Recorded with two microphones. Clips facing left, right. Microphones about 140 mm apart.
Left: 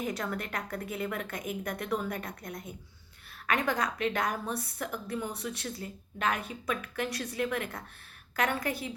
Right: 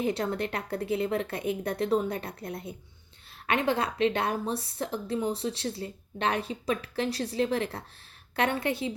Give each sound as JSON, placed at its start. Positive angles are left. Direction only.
{"t": 0.0, "sound": "a woman's voice", "side_deg": -30}